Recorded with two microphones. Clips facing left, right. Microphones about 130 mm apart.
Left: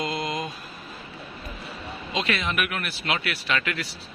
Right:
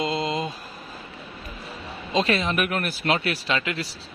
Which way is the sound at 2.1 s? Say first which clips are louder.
Right 4 dB; 35° right (ahead or behind).